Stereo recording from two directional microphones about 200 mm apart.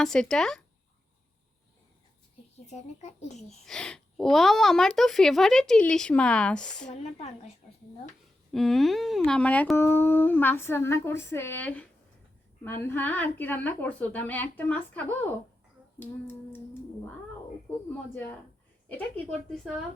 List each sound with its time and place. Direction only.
0.0 s speech: 5° left (ahead or behind)
2.6 s speech: 35° left (ahead or behind)
3.7 s speech: 5° left (ahead or behind)
6.9 s speech: 35° left (ahead or behind)
8.5 s speech: centre (ahead or behind)
17.7 s speech: 10° left (ahead or behind)